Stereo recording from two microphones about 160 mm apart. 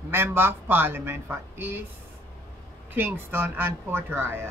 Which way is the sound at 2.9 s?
15° right (ahead or behind).